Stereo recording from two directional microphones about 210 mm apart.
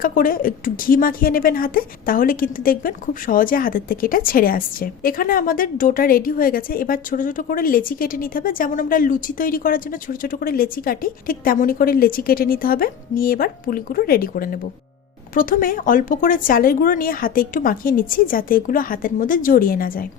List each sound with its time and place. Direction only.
0.0 s a woman's voice: 40° left (ahead or behind)